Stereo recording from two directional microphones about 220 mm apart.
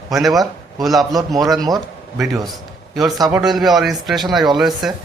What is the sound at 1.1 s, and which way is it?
Speech, 15° right (ahead or behind).